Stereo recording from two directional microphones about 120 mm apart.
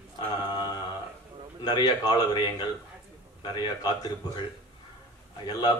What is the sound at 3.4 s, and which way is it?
Speech, 40° left (ahead or behind).